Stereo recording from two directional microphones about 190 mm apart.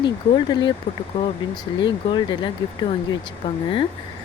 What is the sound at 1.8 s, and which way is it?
Speech, 25° left (ahead or behind).